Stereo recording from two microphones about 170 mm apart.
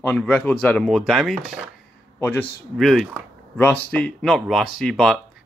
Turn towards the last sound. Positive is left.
turn(degrees=0)  # may be behind; listen again after turning